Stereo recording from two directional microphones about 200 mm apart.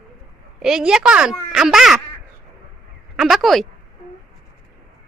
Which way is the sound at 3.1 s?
Centre (ahead or behind).